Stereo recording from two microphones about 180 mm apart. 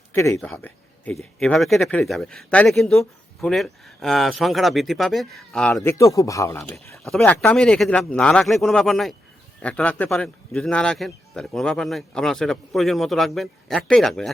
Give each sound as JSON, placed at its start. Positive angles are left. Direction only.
{"t": 0.1, "sound": "speech", "side_deg": 15}
{"t": 7.0, "sound": "speech", "side_deg": 5}